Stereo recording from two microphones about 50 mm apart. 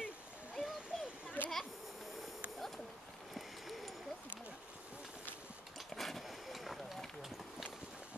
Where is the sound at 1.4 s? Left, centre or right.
Left.